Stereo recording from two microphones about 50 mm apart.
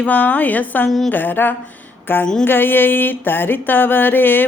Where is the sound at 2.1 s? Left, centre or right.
Left.